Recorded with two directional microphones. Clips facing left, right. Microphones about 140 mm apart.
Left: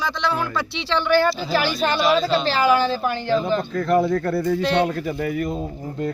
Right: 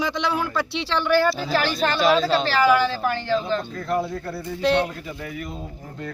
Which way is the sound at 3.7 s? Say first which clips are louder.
Left 6 dB; 90° left.